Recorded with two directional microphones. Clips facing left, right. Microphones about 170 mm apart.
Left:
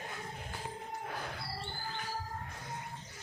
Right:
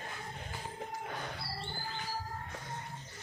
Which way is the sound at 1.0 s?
Centre (ahead or behind).